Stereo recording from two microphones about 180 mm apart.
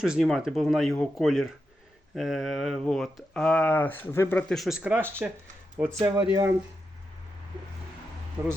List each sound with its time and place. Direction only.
0.0 s speech: 5° right (ahead or behind)
8.4 s speech: 15° right (ahead or behind)